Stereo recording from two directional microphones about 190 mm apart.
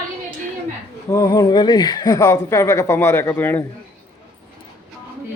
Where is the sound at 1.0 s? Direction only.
20° left (ahead or behind).